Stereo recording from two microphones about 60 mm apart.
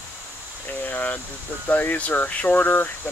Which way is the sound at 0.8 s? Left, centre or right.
Left.